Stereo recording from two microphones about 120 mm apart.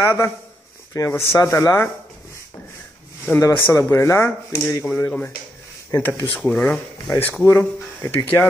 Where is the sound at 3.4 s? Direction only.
25° left (ahead or behind).